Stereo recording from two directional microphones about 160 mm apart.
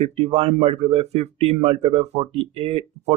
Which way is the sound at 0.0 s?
40° right (ahead or behind).